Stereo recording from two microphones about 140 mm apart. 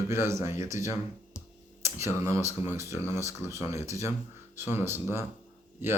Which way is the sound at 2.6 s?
20° right (ahead or behind).